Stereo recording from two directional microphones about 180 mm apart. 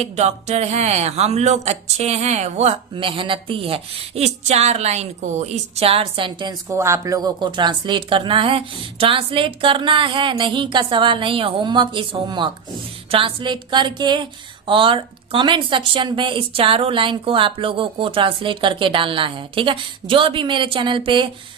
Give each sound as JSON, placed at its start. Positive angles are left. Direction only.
{"t": 0.0, "sound": "a woman's voice", "side_deg": -40}
{"t": 6.7, "sound": "speech", "side_deg": -15}